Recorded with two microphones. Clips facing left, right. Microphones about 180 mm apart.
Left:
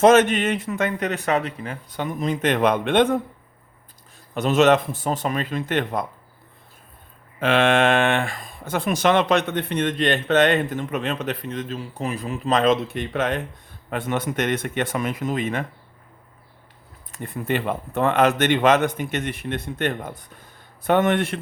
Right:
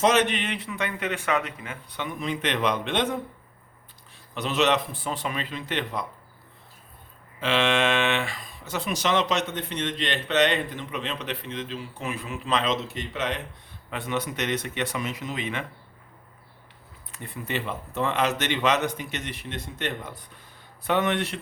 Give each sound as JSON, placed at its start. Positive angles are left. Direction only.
{"t": 0.0, "sound": "speech", "side_deg": 50}
{"t": 4.4, "sound": "speech", "side_deg": 50}
{"t": 7.3, "sound": "speech", "side_deg": 55}
{"t": 17.1, "sound": "speech", "side_deg": 45}